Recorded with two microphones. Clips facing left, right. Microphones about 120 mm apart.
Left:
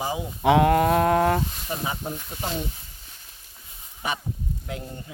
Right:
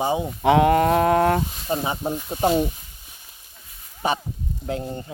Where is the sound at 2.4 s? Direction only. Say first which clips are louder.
Right 11 dB; 40° right (ahead or behind).